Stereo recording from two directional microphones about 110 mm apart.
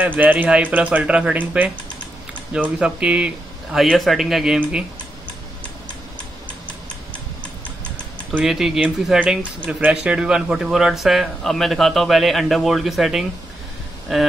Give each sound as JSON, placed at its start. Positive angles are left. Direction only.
{"t": 0.0, "sound": "speech", "side_deg": -15}
{"t": 3.9, "sound": "speech", "side_deg": 0}
{"t": 8.3, "sound": "speech", "side_deg": -5}